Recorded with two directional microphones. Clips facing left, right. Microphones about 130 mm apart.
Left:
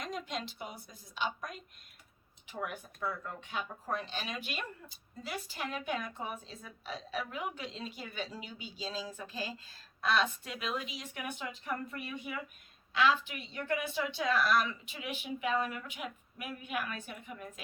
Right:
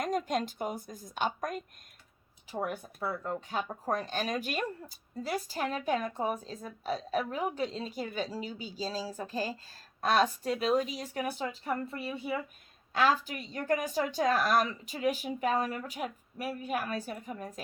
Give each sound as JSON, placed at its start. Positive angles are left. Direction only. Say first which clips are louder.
{"t": 0.0, "sound": "a woman's voice", "louder": "right 8 dB", "side_deg": -45}
{"t": 2.5, "sound": "speech", "louder": "right 5 dB", "side_deg": -35}
{"t": 12.9, "sound": "speech", "louder": "right 2 dB", "side_deg": -45}